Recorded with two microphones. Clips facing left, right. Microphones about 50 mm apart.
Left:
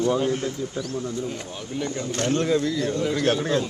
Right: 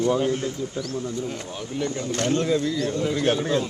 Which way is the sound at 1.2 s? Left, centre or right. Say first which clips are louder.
Even; centre.